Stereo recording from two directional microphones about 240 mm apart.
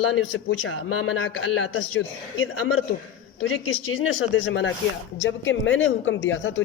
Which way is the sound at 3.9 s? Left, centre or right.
Left.